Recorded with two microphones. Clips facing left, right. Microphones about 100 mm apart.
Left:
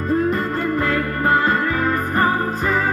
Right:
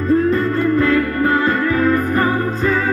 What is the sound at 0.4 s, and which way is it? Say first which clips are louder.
Music: right 5 dB; 30° left (ahead or behind).